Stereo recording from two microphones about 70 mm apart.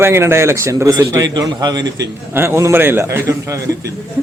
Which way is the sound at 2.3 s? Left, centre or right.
Right.